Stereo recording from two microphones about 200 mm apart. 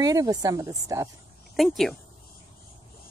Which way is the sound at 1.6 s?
Centre (ahead or behind).